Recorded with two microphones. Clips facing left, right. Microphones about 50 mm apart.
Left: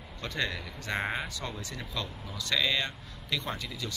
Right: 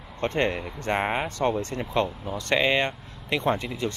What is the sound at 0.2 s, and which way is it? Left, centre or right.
Speech, right.